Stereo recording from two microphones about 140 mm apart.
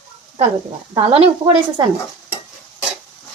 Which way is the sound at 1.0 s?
40° right (ahead or behind).